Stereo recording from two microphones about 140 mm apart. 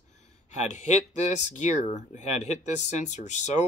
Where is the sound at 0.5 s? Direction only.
60° left (ahead or behind).